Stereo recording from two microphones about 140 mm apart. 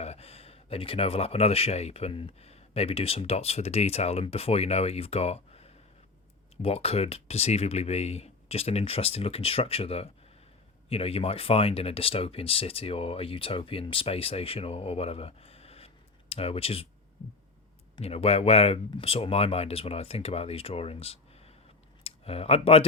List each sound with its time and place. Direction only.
0.0 s speech: 45° left (ahead or behind)
17.9 s speech: 45° left (ahead or behind)